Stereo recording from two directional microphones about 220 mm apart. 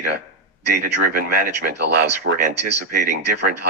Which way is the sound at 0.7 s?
45° right (ahead or behind).